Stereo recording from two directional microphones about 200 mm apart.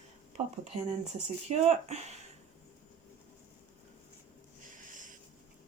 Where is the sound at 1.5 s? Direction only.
35° right (ahead or behind).